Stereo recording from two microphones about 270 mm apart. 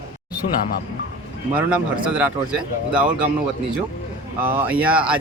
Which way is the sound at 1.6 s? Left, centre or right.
Centre.